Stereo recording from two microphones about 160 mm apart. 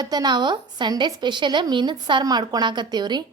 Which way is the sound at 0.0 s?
25° right (ahead or behind).